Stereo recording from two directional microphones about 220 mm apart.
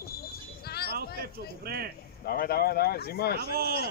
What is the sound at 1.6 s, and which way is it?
Speech, 45° right (ahead or behind).